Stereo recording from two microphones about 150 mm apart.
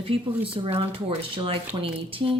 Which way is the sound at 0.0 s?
40° right (ahead or behind).